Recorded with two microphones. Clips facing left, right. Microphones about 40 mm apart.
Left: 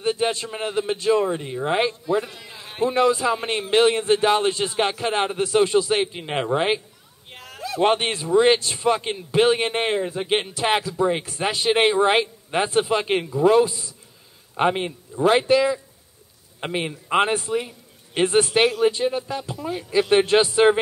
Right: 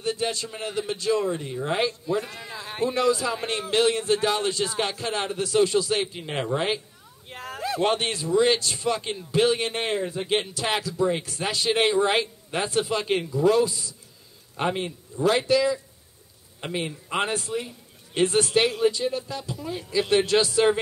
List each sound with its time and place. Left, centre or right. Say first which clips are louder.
0.0 s a man's voice: left 5 dB; left
7.4 s a sound: right 1 dB; right
7.8 s a man's voice: left 5 dB; left